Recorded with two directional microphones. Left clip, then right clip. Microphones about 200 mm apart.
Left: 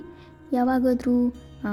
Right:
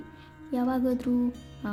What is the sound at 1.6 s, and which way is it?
Music, 20° left (ahead or behind).